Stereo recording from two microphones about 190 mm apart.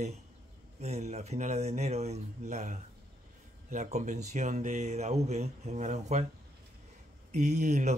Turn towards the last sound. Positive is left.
turn(degrees=-40)  # may be behind; listen again after turning